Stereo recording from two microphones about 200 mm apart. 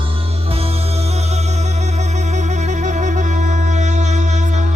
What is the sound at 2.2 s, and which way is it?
Music, 35° right (ahead or behind).